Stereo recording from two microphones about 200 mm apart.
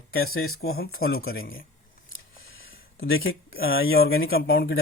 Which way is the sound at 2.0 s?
85° left.